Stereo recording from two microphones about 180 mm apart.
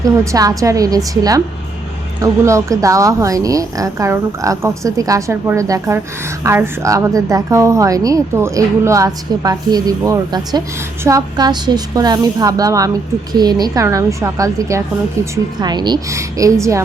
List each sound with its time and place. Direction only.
0.0 s a woman's voice: 20° right (ahead or behind)